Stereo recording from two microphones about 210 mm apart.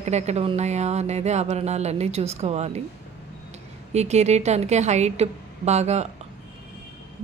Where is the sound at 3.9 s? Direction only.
30° right (ahead or behind).